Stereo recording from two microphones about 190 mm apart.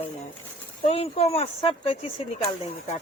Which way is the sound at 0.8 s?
30° left (ahead or behind).